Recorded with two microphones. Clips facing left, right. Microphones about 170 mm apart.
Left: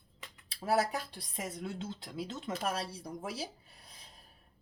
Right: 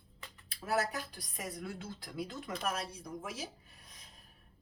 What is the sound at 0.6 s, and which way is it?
A woman's voice, 30° left (ahead or behind).